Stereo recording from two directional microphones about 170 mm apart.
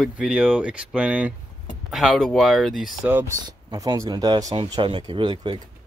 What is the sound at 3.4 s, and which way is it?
Speech, 20° right (ahead or behind).